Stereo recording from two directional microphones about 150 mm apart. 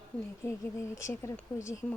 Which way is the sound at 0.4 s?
20° left (ahead or behind).